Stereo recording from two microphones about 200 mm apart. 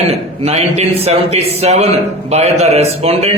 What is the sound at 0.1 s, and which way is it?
A man's voice, 30° right (ahead or behind).